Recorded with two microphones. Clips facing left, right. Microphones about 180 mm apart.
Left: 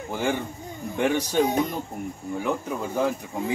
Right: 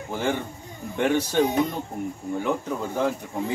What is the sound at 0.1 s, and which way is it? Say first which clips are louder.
Speech: even; 15° left (ahead or behind).